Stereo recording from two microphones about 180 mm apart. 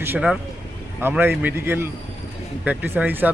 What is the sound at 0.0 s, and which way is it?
A man's voice, 10° right (ahead or behind).